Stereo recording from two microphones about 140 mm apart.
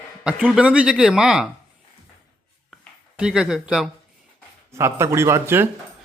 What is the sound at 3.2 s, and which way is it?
Speech, 5° right (ahead or behind).